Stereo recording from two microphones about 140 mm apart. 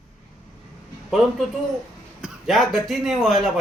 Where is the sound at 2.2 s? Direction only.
Centre (ahead or behind).